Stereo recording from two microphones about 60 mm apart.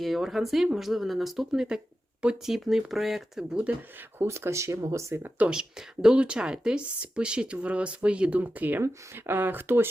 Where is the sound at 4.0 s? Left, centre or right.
Right.